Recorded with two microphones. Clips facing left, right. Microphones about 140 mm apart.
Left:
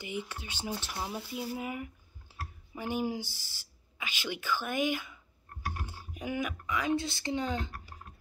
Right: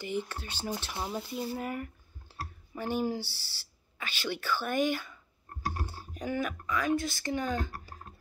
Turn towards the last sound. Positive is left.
turn(degrees=20)  # may be behind; listen again after turning